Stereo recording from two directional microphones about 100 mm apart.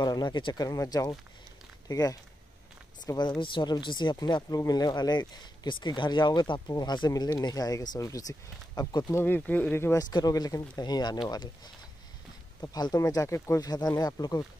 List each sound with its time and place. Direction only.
0.0 s speech: 45° left (ahead or behind)
3.2 s speech: 50° left (ahead or behind)
9.1 s speech: 20° left (ahead or behind)
9.9 s speech: 40° left (ahead or behind)
12.7 s speech: 40° left (ahead or behind)